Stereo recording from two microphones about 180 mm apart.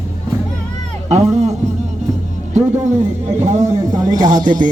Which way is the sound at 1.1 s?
40° right (ahead or behind).